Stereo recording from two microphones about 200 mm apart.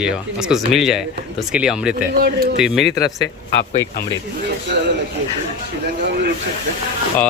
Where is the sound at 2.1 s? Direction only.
50° right (ahead or behind).